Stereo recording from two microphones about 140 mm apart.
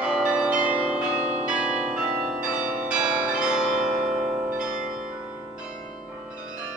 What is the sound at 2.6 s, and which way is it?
Change ringing, 70° right (ahead or behind).